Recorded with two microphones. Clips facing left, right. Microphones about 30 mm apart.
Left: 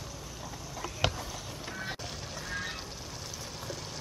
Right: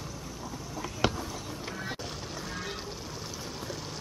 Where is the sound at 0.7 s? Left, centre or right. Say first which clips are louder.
Right 2 dB; centre.